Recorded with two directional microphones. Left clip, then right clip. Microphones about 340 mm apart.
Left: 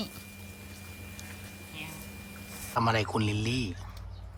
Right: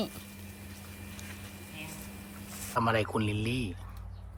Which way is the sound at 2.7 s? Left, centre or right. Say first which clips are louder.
Left 1 dB; centre.